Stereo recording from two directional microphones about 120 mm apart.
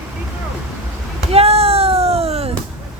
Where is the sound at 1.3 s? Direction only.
55° right (ahead or behind).